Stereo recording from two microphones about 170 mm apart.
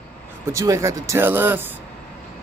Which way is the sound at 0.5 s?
20° right (ahead or behind).